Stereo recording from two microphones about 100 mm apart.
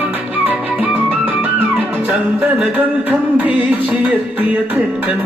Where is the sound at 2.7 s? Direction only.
15° right (ahead or behind).